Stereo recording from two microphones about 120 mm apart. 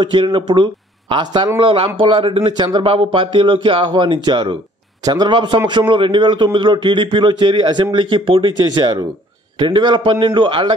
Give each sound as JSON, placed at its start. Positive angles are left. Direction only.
{"t": 0.0, "sound": "a man's voice", "side_deg": -45}